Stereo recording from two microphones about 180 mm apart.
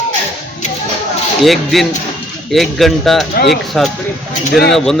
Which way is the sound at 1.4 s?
Centre (ahead or behind).